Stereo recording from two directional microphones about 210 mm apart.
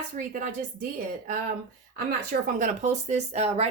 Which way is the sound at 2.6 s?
35° right (ahead or behind).